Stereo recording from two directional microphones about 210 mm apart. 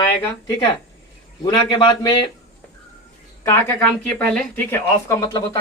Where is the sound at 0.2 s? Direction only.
15° left (ahead or behind).